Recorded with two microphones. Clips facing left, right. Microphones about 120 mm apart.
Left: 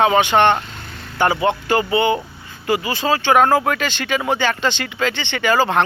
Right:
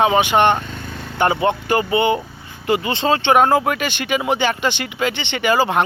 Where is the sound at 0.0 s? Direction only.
15° right (ahead or behind).